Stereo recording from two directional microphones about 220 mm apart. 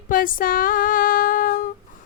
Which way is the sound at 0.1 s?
40° left (ahead or behind).